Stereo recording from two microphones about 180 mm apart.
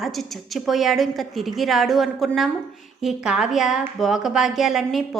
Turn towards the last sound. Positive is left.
turn(degrees=0)  # may be behind; listen again after turning